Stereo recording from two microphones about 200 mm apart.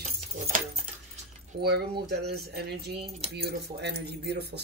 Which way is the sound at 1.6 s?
55° right (ahead or behind).